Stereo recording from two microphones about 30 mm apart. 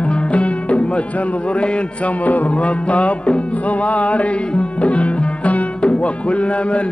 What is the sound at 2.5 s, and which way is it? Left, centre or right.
Music, left.